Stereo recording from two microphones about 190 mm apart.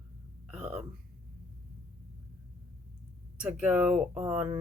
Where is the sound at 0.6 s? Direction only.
35° right (ahead or behind).